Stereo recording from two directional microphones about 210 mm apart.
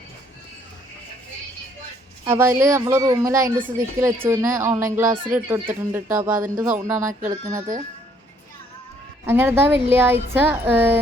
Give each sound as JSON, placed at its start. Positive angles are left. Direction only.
{"t": 2.2, "sound": "speech", "side_deg": -10}
{"t": 7.1, "sound": "speech", "side_deg": -40}
{"t": 9.2, "sound": "speech", "side_deg": -10}